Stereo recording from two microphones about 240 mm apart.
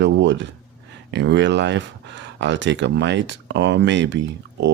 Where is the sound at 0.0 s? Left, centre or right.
Right.